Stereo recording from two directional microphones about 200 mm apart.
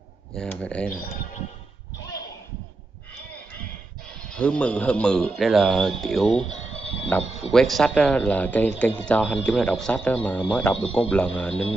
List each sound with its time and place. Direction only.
0.3 s speech: 5° left (ahead or behind)
4.1 s speech: 5° left (ahead or behind)
6.7 s a sound: 30° left (ahead or behind)
7.5 s a man's voice: centre (ahead or behind)